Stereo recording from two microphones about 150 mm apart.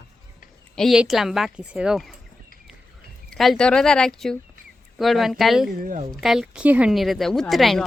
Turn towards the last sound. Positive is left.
turn(degrees=0)  # may be behind; listen again after turning